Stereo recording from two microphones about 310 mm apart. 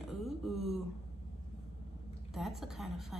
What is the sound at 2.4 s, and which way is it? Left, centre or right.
Speech, centre.